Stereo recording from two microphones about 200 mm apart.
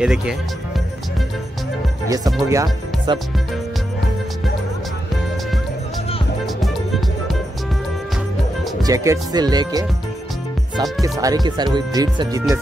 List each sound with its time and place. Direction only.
0.0 s speech: 5° right (ahead or behind)
2.0 s speech: 20° right (ahead or behind)
6.4 s music: centre (ahead or behind)
8.8 s speech: 15° right (ahead or behind)
11.1 s speech: 20° right (ahead or behind)